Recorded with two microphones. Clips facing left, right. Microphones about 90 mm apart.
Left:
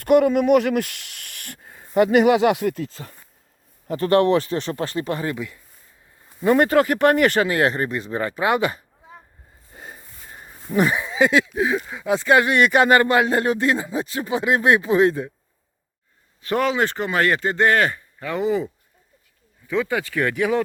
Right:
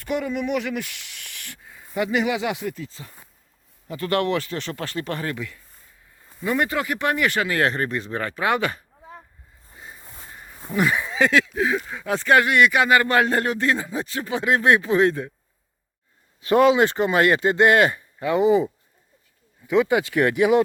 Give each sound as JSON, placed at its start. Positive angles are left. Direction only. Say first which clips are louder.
{"t": 0.0, "sound": "speech", "louder": "left 10 dB", "side_deg": 60}
{"t": 3.8, "sound": "speech", "louder": "left 6 dB", "side_deg": 35}
{"t": 6.4, "sound": "speech", "louder": "left 7 dB", "side_deg": 45}
{"t": 7.3, "sound": "speech", "louder": "left 4 dB", "side_deg": 25}
{"t": 7.6, "sound": "speech", "louder": "left 2 dB", "side_deg": 10}
{"t": 9.7, "sound": "a sound", "louder": "left 3 dB", "side_deg": 55}
{"t": 11.0, "sound": "a sound", "louder": "left 2 dB", "side_deg": 5}
{"t": 11.3, "sound": "speech", "louder": "left 1 dB", "side_deg": 20}
{"t": 11.9, "sound": "speech", "louder": "left 3 dB", "side_deg": 10}
{"t": 12.3, "sound": "speech", "louder": "even", "side_deg": 20}
{"t": 12.5, "sound": "speech", "louder": "left 2 dB", "side_deg": 40}
{"t": 13.1, "sound": "speech", "louder": "left 2 dB", "side_deg": 15}
{"t": 16.4, "sound": "speech", "louder": "right 5 dB", "side_deg": -20}